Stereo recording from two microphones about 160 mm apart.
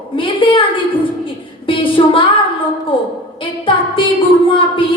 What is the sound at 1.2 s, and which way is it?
Music, 35° left (ahead or behind).